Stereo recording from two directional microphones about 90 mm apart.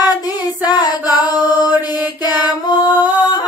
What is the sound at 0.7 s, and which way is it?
Chant, 50° left (ahead or behind).